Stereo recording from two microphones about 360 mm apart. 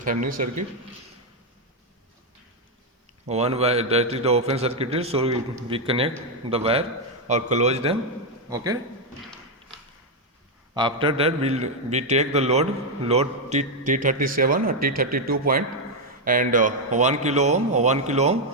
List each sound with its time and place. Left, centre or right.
0.0 s speech: right
3.2 s a man's voice: centre
10.8 s a man's voice: centre